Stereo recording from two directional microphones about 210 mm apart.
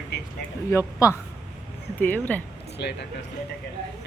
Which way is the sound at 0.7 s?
15° left (ahead or behind).